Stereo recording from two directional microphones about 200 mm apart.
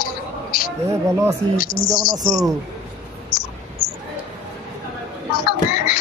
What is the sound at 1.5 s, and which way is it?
Speech, 45° left (ahead or behind).